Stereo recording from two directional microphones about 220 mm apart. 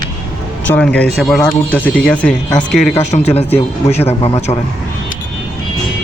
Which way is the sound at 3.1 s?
30° left (ahead or behind).